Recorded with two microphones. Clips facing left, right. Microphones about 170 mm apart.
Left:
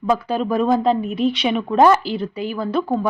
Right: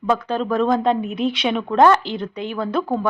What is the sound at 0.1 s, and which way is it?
Speech, 10° left (ahead or behind).